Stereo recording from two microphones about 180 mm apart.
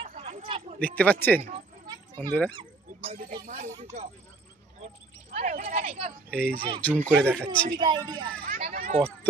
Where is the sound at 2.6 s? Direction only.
30° right (ahead or behind).